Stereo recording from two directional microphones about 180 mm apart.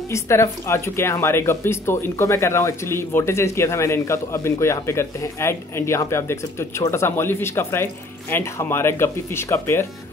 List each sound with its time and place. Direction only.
0.1 s speech: 15° left (ahead or behind)